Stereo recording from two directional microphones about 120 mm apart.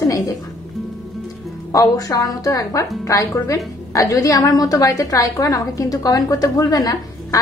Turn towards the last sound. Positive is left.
turn(degrees=30)  # may be behind; listen again after turning